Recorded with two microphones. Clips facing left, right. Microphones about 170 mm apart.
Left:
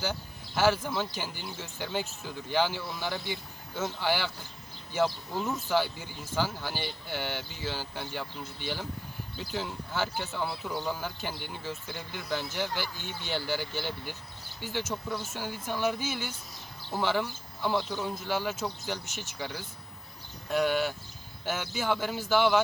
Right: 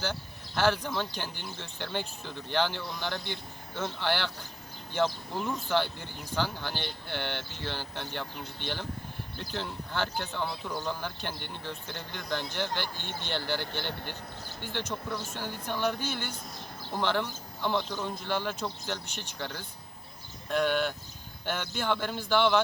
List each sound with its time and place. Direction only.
0.0 s speech: 10° left (ahead or behind)
14.6 s speech: 10° left (ahead or behind)